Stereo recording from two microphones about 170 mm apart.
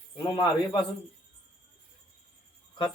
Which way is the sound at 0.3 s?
25° left (ahead or behind).